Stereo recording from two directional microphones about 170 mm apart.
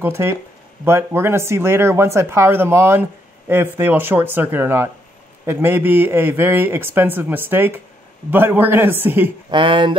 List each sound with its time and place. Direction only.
0.0 s speech: 15° right (ahead or behind)
9.5 s speech: 30° right (ahead or behind)